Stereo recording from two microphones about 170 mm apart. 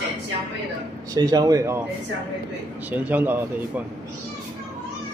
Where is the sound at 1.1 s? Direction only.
20° right (ahead or behind).